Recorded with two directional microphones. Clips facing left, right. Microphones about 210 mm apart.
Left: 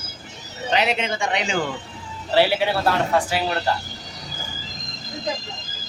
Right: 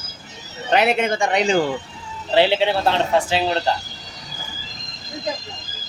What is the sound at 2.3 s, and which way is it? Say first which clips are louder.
Speech: right 2 dB; 25° right (ahead or behind).